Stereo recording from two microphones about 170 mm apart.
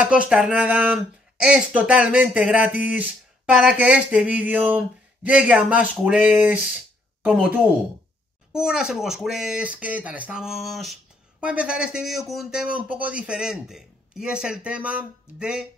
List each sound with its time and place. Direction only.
0.0 s speech: 5° right (ahead or behind)